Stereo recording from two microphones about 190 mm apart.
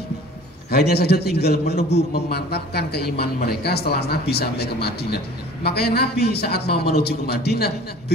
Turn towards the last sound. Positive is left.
turn(degrees=55)  # may be behind; listen again after turning